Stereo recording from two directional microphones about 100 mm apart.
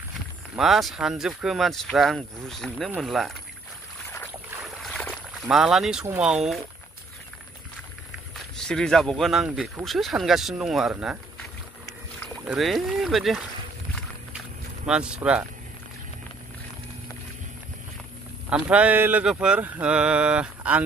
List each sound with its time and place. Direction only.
0.6 s speech: centre (ahead or behind)
4.6 s boat: centre (ahead or behind)
5.1 s speech: 5° right (ahead or behind)
8.5 s speech: 5° left (ahead or behind)
12.5 s speech: centre (ahead or behind)
14.9 s speech: 10° right (ahead or behind)
18.5 s speech: 10° right (ahead or behind)